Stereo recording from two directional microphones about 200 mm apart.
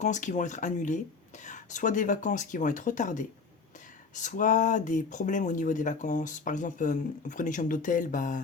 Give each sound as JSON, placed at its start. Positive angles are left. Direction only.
{"t": 0.0, "sound": "speech", "side_deg": 35}